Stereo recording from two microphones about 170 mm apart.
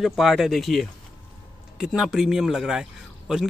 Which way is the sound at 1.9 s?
Centre (ahead or behind).